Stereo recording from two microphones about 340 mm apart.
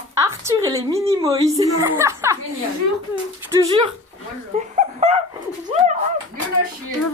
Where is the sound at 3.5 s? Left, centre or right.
Centre.